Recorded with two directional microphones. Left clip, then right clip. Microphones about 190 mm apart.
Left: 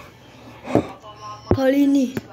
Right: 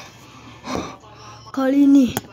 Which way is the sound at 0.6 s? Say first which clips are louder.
Left 6 dB; 55° right (ahead or behind).